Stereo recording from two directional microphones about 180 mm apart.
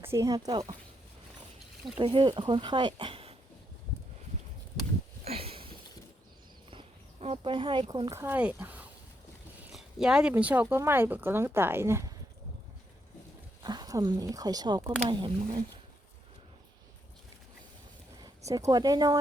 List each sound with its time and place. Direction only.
0.0 s speech: 15° right (ahead or behind)
2.0 s speech: 30° right (ahead or behind)
5.2 s a sound: 35° right (ahead or behind)
6.7 s horse: 35° right (ahead or behind)
8.2 s speech: 10° right (ahead or behind)
13.6 s speech: 20° right (ahead or behind)
18.2 s speech: 20° right (ahead or behind)